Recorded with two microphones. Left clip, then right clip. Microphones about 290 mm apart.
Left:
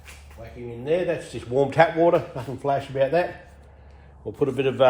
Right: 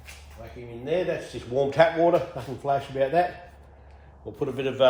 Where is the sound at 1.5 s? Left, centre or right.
Left.